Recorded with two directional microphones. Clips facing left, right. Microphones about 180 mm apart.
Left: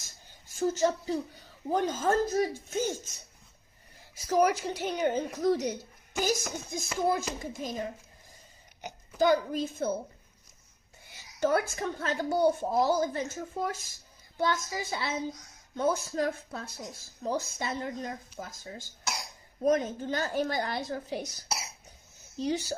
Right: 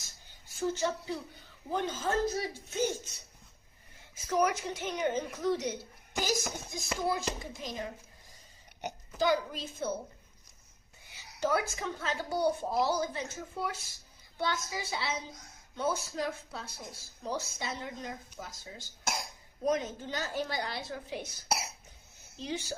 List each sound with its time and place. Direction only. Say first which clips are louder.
0.7 s a woman's voice: left 6 dB; 40° left (ahead or behind)
4.2 s a woman's voice: left 4 dB; 35° left (ahead or behind)
9.1 s a woman's voice: left 5 dB; 50° left (ahead or behind)
11.3 s a woman's voice: left 4 dB; 55° left (ahead or behind)
19.1 s cough: right 1 dB; 50° right (ahead or behind)
19.6 s a woman's voice: left 5 dB; 50° left (ahead or behind)